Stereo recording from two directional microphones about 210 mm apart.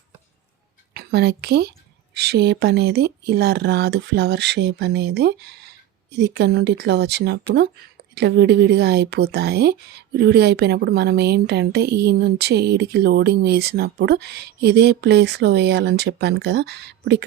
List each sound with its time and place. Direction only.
0.9 s a woman's voice: 50° right (ahead or behind)